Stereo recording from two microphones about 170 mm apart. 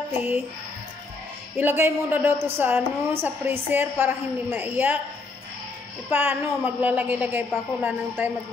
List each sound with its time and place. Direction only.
1.6 s a woman's voice: 10° right (ahead or behind)
6.0 s a woman's voice: 10° right (ahead or behind)